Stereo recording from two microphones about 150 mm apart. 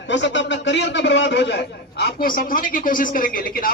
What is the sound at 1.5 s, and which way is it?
A man's voice, 90° left.